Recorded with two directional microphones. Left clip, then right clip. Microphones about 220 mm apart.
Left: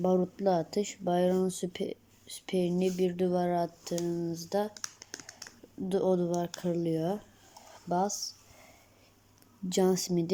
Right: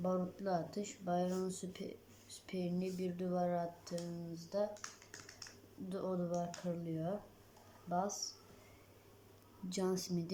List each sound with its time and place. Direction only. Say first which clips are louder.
0.0 s speech: left 11 dB; 35° left (ahead or behind)
4.7 s computer keyboard: left 7 dB; 25° left (ahead or behind)
5.9 s speech: left 12 dB; 35° left (ahead or behind)
9.6 s speech: left 11 dB; 35° left (ahead or behind)